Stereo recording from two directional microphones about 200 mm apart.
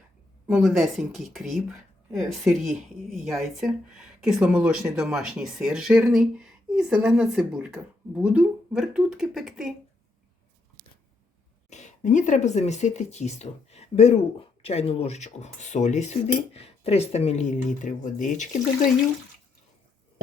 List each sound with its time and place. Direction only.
0.4 s speech: centre (ahead or behind)
11.7 s speech: 35° left (ahead or behind)